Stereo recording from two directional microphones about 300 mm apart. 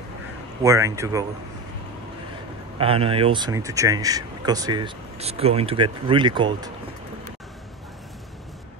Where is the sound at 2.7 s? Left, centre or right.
Centre.